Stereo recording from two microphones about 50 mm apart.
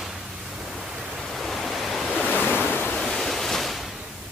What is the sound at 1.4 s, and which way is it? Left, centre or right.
Pink noise, centre.